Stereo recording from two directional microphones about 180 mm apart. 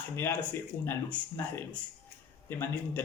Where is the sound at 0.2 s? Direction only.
10° left (ahead or behind).